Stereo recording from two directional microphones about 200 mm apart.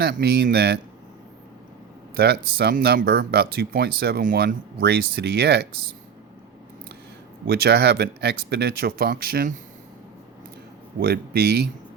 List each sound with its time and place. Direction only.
0.0 s speech: 55° right (ahead or behind)
2.1 s speech: 55° right (ahead or behind)
7.4 s speech: 55° right (ahead or behind)
11.0 s speech: 50° right (ahead or behind)